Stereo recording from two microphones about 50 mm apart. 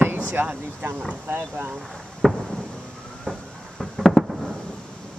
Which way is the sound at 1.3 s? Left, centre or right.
Right.